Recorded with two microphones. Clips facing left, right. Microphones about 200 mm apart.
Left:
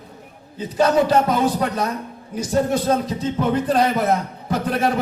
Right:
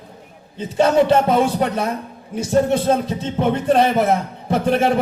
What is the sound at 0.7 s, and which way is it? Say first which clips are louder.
Speech: right 2 dB; 25° right (ahead or behind).